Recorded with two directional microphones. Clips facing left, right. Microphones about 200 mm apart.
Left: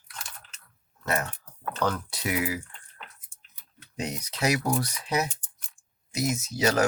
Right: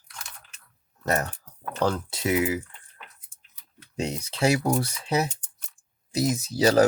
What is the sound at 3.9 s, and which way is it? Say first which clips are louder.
Speech: right 4 dB; 30° right (ahead or behind).